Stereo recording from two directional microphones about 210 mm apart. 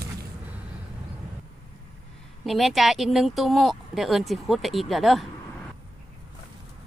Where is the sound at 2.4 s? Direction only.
Centre (ahead or behind).